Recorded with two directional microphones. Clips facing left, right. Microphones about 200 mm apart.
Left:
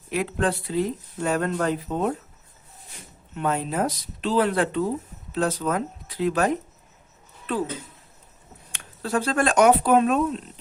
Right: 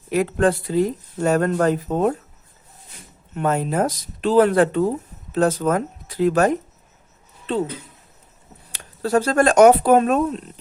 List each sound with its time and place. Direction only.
0.1 s speech: 45° right (ahead or behind)
3.3 s speech: 45° right (ahead or behind)
7.5 s speech: 30° right (ahead or behind)
8.7 s speech: 40° right (ahead or behind)